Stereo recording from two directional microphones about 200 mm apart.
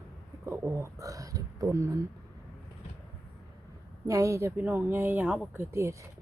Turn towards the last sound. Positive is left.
turn(degrees=-15)  # may be behind; listen again after turning